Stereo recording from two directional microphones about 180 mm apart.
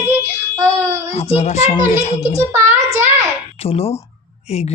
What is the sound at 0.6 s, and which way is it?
Child singing, 15° right (ahead or behind).